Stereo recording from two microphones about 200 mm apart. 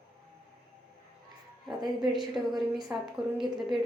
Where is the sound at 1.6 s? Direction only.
20° right (ahead or behind).